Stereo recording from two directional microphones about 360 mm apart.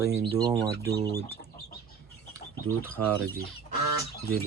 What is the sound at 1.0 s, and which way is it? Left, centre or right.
Speech, centre.